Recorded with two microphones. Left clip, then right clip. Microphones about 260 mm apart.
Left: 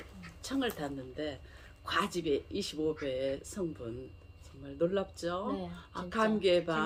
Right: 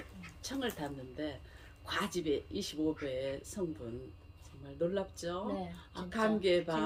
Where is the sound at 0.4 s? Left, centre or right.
Centre.